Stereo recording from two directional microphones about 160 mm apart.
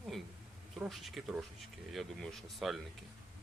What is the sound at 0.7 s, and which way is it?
Speech, centre (ahead or behind).